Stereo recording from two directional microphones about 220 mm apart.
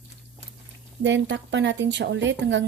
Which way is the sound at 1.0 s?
55° right (ahead or behind).